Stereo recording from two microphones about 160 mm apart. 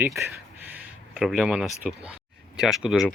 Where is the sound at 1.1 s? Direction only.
Centre (ahead or behind).